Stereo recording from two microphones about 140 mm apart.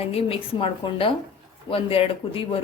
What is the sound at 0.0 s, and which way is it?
Speech, 45° left (ahead or behind).